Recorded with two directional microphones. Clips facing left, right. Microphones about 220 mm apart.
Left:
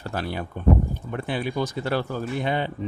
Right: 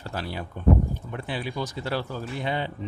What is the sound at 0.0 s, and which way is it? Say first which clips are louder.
A man's voice: left 4 dB; 55° left (ahead or behind).